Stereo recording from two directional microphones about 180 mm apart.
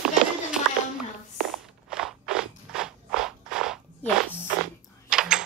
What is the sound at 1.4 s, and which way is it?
Crunch, centre (ahead or behind).